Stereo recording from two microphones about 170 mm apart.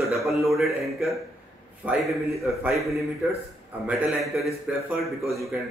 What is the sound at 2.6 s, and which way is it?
Speech, 15° right (ahead or behind).